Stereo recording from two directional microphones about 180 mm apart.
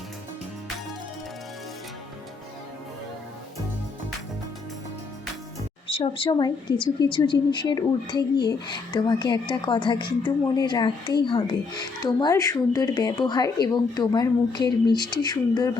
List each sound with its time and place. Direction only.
5.9 s a woman's voice: 30° left (ahead or behind)